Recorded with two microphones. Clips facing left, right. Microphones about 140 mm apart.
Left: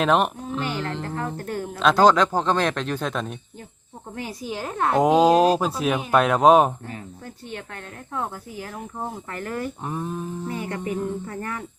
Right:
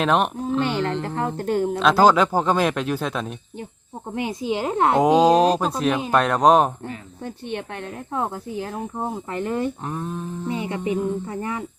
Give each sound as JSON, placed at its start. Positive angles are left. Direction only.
{"t": 0.0, "sound": "speech", "side_deg": 0}
{"t": 1.0, "sound": "speech", "side_deg": -30}
{"t": 1.8, "sound": "speech", "side_deg": -5}
{"t": 4.1, "sound": "speech", "side_deg": -20}
{"t": 4.9, "sound": "speech", "side_deg": 0}
{"t": 7.3, "sound": "speech", "side_deg": -20}
{"t": 9.8, "sound": "speech", "side_deg": 5}
{"t": 10.5, "sound": "speech", "side_deg": -20}